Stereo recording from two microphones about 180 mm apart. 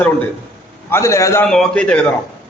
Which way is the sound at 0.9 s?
15° left (ahead or behind).